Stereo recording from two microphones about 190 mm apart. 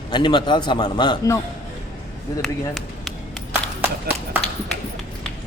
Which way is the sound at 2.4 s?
Centre (ahead or behind).